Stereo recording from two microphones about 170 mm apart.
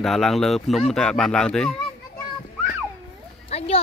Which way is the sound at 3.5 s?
35° left (ahead or behind).